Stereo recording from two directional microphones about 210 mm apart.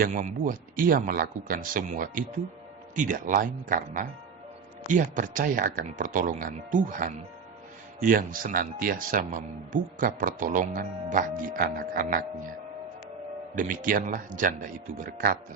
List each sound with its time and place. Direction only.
0.0 s speech: 35° right (ahead or behind)
13.6 s speech: 40° right (ahead or behind)